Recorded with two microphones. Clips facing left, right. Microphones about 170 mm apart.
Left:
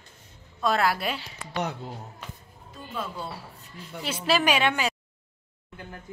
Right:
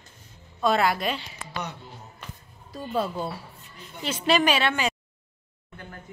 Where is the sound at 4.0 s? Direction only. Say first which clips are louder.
Right 2 dB; 10° left (ahead or behind).